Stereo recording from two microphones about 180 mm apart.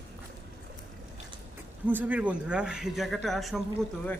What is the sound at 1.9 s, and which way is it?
A man's voice, 10° right (ahead or behind).